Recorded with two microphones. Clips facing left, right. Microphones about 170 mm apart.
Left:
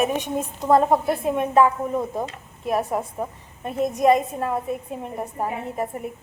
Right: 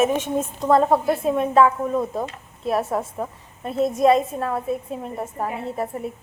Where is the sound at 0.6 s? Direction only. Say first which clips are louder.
Even; 20° left (ahead or behind).